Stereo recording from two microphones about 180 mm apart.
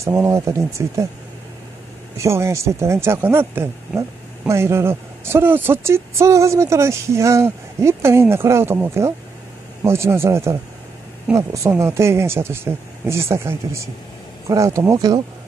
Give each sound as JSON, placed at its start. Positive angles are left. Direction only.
{"t": 0.0, "sound": "speech", "side_deg": -15}
{"t": 2.1, "sound": "speech", "side_deg": -15}